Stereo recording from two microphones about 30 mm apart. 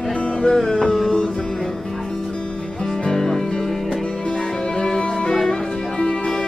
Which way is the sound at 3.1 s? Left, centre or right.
Centre.